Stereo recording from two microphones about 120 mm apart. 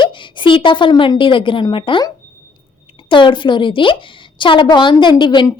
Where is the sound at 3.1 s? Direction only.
45° left (ahead or behind).